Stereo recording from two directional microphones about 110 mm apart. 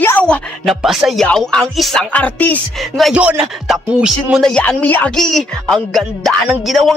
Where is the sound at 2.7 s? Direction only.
Centre (ahead or behind).